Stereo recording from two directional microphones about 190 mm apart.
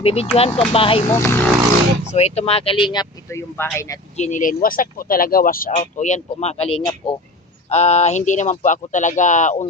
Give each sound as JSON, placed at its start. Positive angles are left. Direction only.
{"t": 0.0, "sound": "speech", "side_deg": 30}
{"t": 1.1, "sound": "speech", "side_deg": 10}
{"t": 2.1, "sound": "speech", "side_deg": 35}
{"t": 4.2, "sound": "speech", "side_deg": 40}
{"t": 6.0, "sound": "speech", "side_deg": 40}